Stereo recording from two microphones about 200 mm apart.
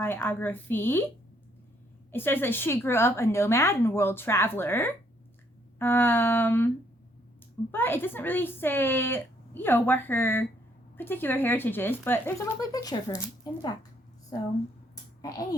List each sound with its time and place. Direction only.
0.0 s speech: 10° left (ahead or behind)
2.1 s speech: 10° left (ahead or behind)
7.7 s speech: 10° left (ahead or behind)
15.2 s a child's voice: 20° left (ahead or behind)